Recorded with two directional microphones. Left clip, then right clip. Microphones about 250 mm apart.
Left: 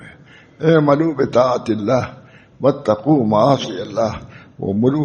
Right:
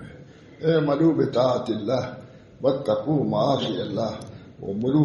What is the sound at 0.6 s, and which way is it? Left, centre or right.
A man's voice, left.